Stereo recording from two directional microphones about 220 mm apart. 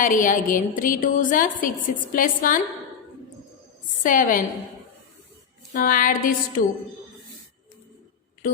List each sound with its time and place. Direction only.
0.0 s a woman's voice: 35° left (ahead or behind)
4.0 s a woman's voice: 35° left (ahead or behind)
5.7 s a woman's voice: 40° left (ahead or behind)